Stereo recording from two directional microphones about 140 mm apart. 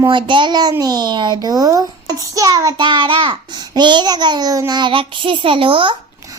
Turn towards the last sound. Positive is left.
turn(degrees=-40)  # may be behind; listen again after turning